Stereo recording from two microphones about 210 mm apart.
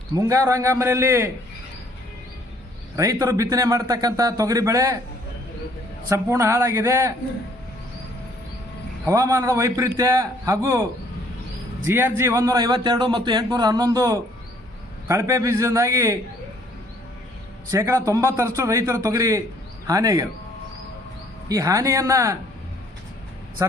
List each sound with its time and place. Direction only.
0.2 s a man's voice: 15° right (ahead or behind)
2.9 s a man's voice: 15° right (ahead or behind)
6.1 s a man's voice: 15° right (ahead or behind)
9.0 s a man's voice: 15° right (ahead or behind)
11.9 s a man's voice: 10° right (ahead or behind)
17.7 s a man's voice: 15° right (ahead or behind)
21.5 s a man's voice: 15° right (ahead or behind)
23.6 s a man's voice: 15° right (ahead or behind)